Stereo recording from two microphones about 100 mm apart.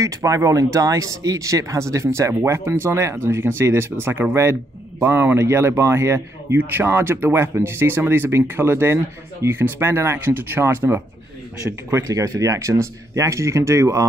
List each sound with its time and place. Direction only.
0.0 s a man's voice: 35° right (ahead or behind)
11.9 s speech: 35° right (ahead or behind)